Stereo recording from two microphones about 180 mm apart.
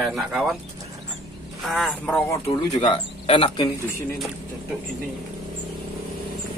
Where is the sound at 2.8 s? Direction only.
30° left (ahead or behind).